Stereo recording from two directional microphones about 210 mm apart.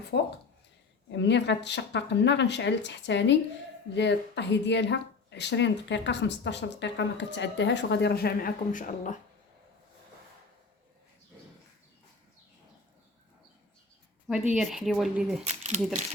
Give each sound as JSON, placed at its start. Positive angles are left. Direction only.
{"t": 0.1, "sound": "speech", "side_deg": 55}
{"t": 14.5, "sound": "speech", "side_deg": 0}
{"t": 15.4, "sound": "speech", "side_deg": -30}